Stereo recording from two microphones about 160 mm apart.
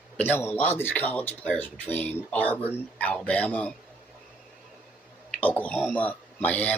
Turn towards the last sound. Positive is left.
turn(degrees=10)  # may be behind; listen again after turning